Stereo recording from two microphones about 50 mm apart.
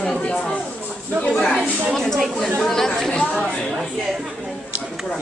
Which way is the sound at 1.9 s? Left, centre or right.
Centre.